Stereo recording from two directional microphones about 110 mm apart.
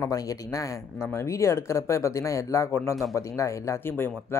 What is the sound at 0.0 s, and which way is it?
Speech, 30° left (ahead or behind).